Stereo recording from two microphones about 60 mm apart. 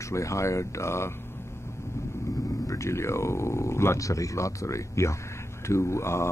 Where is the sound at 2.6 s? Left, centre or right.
Left.